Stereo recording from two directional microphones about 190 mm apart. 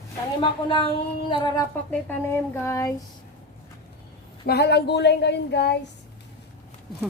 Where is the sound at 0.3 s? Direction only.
25° left (ahead or behind).